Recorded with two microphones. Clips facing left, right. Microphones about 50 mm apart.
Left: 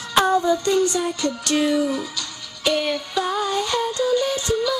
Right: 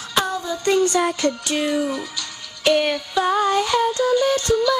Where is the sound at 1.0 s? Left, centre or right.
Right.